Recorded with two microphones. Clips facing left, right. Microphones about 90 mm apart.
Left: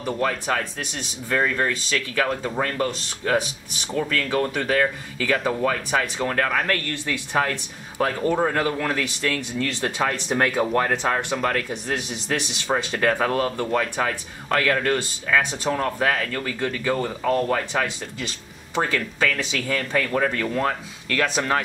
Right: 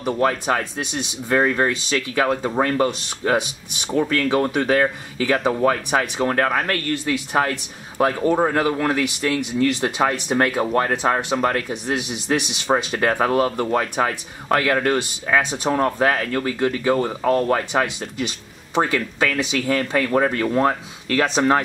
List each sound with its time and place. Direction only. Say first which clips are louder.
0.3 s speech: right 3 dB; 20° right (ahead or behind)
6.5 s speech: right 2 dB; 5° right (ahead or behind); by 21.5 s 25° right (ahead or behind)